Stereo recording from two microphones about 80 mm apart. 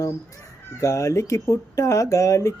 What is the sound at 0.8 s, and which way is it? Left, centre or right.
Mantra, left.